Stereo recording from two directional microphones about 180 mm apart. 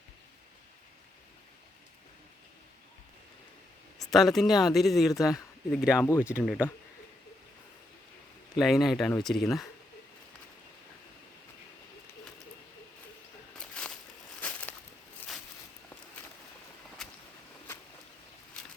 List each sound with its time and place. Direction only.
3.9 s a sound: centre (ahead or behind)
4.4 s speech: centre (ahead or behind)
6.0 s speech: 15° left (ahead or behind)
6.2 s speech: 5° right (ahead or behind)
8.5 s speech: centre (ahead or behind)
13.6 s a sound: 5° left (ahead or behind)